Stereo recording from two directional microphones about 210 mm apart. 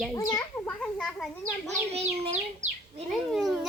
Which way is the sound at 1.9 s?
30° right (ahead or behind).